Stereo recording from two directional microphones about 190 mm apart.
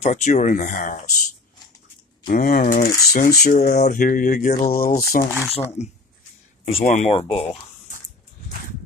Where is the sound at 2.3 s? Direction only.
45° left (ahead or behind).